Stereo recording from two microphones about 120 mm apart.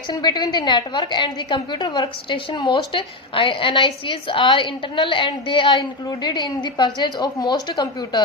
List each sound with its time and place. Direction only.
0.1 s a woman's voice: 35° left (ahead or behind)